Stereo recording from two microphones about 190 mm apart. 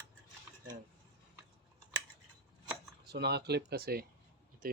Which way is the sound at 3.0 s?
60° right (ahead or behind).